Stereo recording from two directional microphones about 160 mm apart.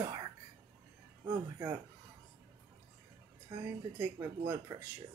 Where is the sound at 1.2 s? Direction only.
20° right (ahead or behind).